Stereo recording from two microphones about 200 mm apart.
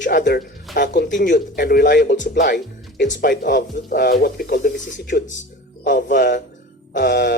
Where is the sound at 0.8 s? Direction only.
60° left (ahead or behind).